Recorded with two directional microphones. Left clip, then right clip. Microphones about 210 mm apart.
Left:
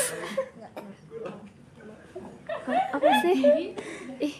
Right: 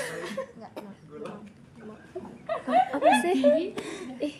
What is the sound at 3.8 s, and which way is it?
Speech, 50° right (ahead or behind).